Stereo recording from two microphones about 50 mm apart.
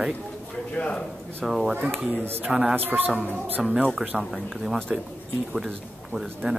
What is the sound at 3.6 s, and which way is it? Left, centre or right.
Speech, centre.